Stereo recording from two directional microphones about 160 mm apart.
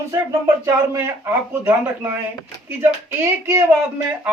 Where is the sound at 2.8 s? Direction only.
15° right (ahead or behind).